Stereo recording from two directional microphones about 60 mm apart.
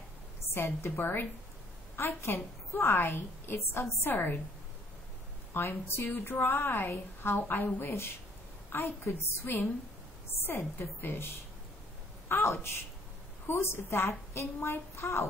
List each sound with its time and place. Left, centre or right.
0.6 s a woman's voice: left
5.5 s a woman's voice: left
8.7 s a woman's voice: left